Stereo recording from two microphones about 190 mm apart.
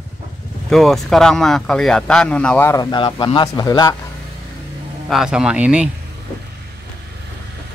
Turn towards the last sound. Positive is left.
turn(degrees=-5)  # may be behind; listen again after turning